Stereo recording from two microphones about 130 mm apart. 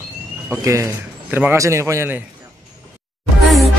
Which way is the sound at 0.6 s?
25° right (ahead or behind).